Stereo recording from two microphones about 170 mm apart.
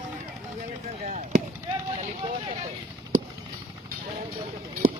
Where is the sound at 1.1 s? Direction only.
45° right (ahead or behind).